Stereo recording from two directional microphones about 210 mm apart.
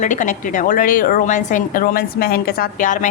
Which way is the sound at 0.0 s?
35° left (ahead or behind).